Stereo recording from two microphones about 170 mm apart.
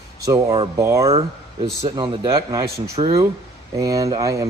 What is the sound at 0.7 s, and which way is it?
Speech, 20° right (ahead or behind).